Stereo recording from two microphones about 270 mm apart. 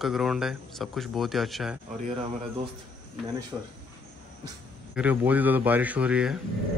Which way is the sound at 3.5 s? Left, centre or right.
Centre.